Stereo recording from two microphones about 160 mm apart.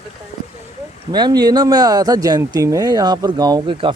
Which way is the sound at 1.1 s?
25° right (ahead or behind).